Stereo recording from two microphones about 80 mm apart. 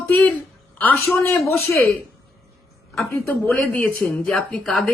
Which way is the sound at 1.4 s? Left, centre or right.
Left.